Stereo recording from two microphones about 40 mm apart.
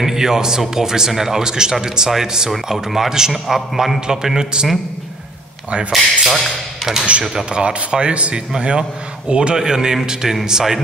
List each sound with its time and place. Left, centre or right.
0.0 s a man's voice: centre
5.9 s speech: centre
7.3 s speech: right
10.2 s a man's voice: centre